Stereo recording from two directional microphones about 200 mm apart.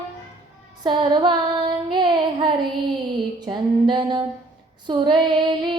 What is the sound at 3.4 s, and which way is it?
Music, 25° right (ahead or behind).